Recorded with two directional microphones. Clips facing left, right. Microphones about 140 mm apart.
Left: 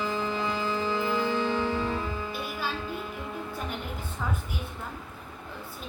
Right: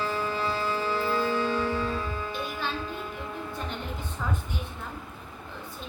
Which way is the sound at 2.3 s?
10° left (ahead or behind).